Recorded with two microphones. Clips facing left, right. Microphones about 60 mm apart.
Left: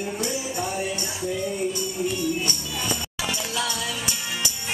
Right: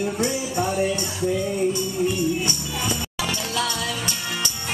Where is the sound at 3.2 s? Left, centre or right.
Centre.